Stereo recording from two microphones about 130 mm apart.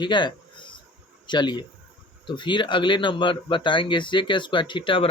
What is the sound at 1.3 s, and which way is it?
Speech, 35° left (ahead or behind).